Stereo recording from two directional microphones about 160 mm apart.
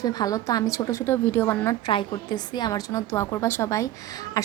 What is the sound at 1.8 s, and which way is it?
Speech, 25° left (ahead or behind).